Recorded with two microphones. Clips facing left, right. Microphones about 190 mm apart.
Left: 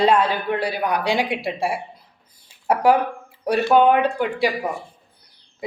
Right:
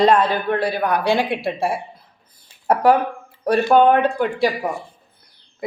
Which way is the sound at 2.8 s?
10° left (ahead or behind).